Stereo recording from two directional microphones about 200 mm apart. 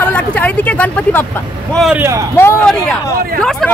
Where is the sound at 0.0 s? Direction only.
5° left (ahead or behind); by 2.2 s 10° right (ahead or behind).